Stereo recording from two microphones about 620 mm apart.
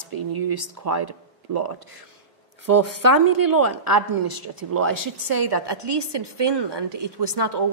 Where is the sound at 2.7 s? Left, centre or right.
Right.